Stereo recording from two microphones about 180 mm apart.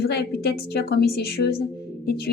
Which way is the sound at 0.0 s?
65° left (ahead or behind).